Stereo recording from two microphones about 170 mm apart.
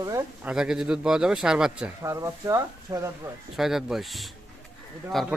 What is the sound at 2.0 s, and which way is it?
Speech, 20° right (ahead or behind).